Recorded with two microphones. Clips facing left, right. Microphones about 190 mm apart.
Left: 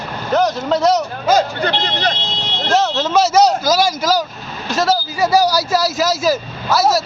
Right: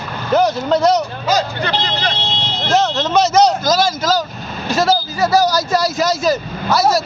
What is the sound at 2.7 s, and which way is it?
A man's voice, 5° left (ahead or behind).